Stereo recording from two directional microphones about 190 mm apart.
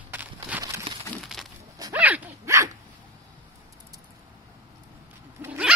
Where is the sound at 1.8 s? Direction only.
10° right (ahead or behind).